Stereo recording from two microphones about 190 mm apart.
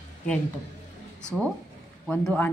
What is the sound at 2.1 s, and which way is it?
Speech, 10° left (ahead or behind).